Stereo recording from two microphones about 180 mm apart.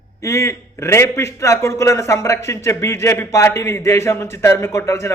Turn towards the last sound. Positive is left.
turn(degrees=15)  # may be behind; listen again after turning